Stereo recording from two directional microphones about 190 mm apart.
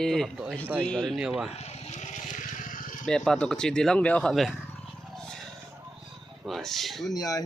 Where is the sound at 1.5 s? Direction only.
35° left (ahead or behind).